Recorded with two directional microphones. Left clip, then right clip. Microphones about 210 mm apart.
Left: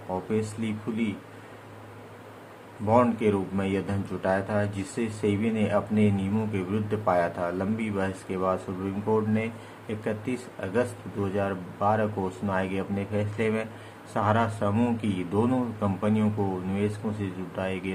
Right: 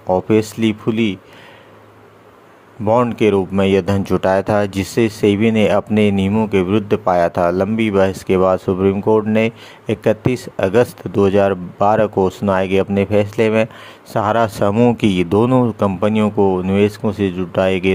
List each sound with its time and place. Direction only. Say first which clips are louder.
0.1 s speech: right 15 dB; 50° right (ahead or behind)
2.8 s speech: right 9 dB; 45° right (ahead or behind)